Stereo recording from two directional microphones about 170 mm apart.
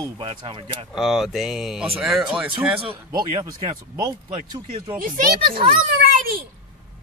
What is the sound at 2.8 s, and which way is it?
Speech, 30° right (ahead or behind).